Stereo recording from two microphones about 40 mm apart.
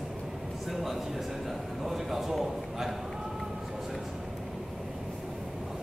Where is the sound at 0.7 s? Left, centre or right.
Centre.